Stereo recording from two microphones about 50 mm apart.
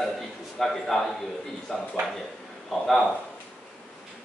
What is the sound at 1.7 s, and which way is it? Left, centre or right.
Speech, centre.